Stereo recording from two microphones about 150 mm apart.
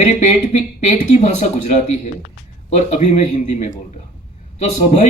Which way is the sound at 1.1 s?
50° left (ahead or behind).